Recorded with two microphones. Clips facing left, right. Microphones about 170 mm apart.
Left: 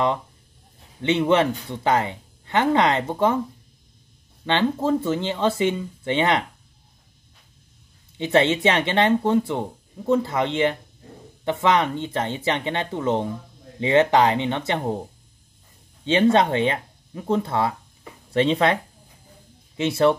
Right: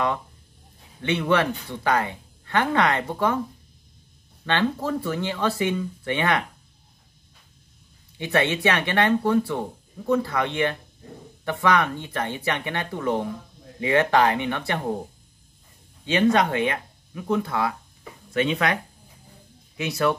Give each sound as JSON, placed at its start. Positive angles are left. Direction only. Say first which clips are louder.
{"t": 1.0, "sound": "speech", "louder": "left 3 dB", "side_deg": 25}
{"t": 4.5, "sound": "speech", "louder": "left 3 dB", "side_deg": 20}
{"t": 8.2, "sound": "speech", "louder": "left 4 dB", "side_deg": 25}
{"t": 16.1, "sound": "speech", "louder": "left 2 dB", "side_deg": 25}
{"t": 19.8, "sound": "speech", "louder": "left 5 dB", "side_deg": 25}